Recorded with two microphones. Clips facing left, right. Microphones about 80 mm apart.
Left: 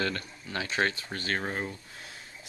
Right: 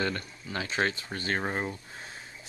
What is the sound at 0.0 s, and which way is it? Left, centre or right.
Speech, centre.